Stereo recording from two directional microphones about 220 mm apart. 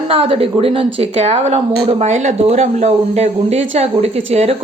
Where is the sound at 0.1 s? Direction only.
25° right (ahead or behind).